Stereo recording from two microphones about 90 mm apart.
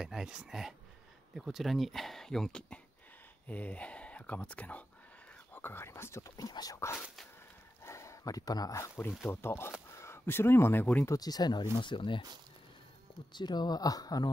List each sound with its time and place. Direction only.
0.0 s speech: 5° right (ahead or behind); by 6.8 s 45° left (ahead or behind)
7.8 s speech: 35° left (ahead or behind)
11.1 s speech: 45° left (ahead or behind)
11.8 s speech: 65° left (ahead or behind)
13.3 s speech: 55° left (ahead or behind)